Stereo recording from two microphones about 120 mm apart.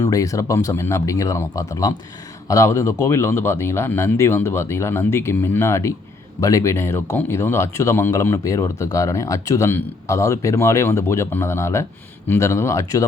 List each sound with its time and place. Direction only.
0.0 s speech: 30° left (ahead or behind)